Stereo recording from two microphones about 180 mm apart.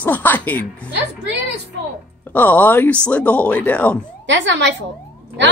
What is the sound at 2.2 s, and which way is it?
Speech, 10° left (ahead or behind).